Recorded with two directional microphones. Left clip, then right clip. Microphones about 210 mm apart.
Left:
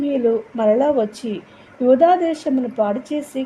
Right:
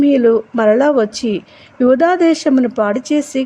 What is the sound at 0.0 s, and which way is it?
A woman's voice, 30° right (ahead or behind).